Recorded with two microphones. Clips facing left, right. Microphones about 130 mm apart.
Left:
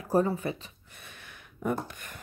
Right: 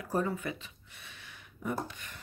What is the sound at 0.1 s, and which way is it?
Speech, 35° left (ahead or behind).